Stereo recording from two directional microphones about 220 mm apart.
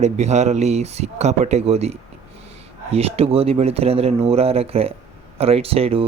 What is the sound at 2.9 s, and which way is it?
Speech, 25° right (ahead or behind).